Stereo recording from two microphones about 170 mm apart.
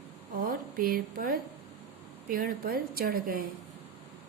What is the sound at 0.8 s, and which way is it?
A woman's voice, 55° right (ahead or behind).